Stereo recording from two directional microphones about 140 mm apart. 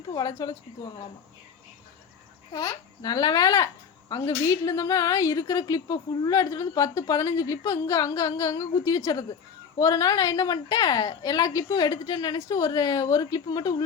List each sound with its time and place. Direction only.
0.1 s a woman's voice: 25° left (ahead or behind)
2.5 s a woman's voice: 25° left (ahead or behind)